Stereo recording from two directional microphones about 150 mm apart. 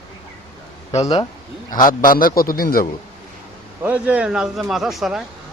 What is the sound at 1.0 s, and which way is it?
Speech, 25° left (ahead or behind).